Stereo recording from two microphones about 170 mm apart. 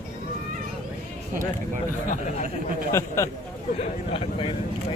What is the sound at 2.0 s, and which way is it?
Speech, 50° left (ahead or behind).